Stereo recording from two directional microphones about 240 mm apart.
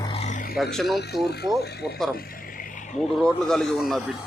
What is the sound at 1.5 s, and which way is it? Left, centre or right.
Speech, centre.